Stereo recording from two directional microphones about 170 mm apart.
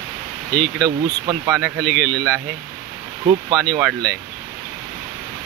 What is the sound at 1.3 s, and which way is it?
Speech, 20° right (ahead or behind).